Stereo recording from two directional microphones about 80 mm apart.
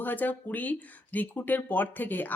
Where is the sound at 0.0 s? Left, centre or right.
Left.